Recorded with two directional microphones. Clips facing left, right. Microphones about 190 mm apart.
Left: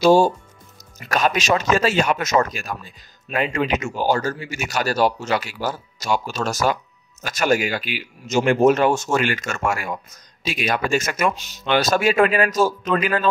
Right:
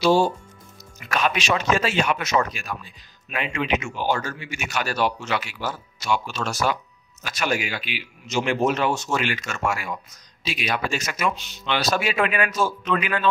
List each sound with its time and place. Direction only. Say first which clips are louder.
0.0 s a man's voice: left 4 dB; 45° left (ahead or behind)